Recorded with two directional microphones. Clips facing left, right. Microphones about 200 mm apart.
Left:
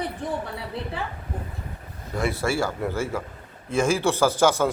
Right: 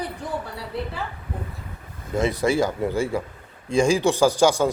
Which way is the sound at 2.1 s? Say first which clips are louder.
Right 4 dB; 20° right (ahead or behind).